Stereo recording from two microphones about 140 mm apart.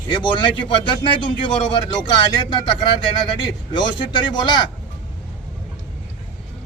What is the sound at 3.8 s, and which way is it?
Speech, 35° left (ahead or behind).